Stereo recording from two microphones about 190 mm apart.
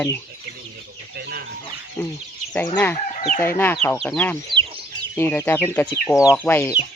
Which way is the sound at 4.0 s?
5° left (ahead or behind).